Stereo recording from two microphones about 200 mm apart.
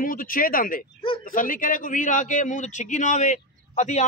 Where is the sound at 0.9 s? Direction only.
25° left (ahead or behind).